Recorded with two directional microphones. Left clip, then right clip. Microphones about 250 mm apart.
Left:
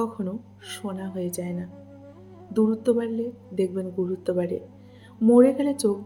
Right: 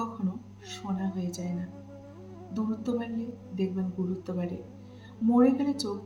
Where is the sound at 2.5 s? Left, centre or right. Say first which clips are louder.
Left 11 dB; left.